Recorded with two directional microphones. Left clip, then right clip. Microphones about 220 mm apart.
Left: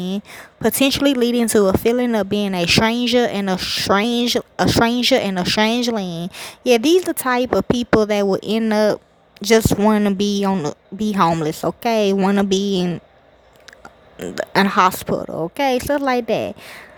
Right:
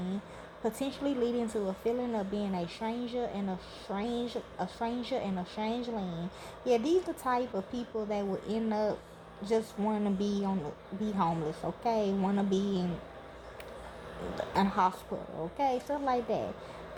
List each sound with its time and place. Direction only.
0.6 s speech: 50° left (ahead or behind)
14.3 s speech: 50° left (ahead or behind)